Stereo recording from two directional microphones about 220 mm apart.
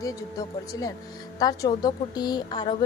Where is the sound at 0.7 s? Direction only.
15° left (ahead or behind).